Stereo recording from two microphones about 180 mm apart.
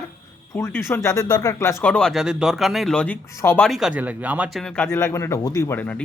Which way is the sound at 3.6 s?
Centre (ahead or behind).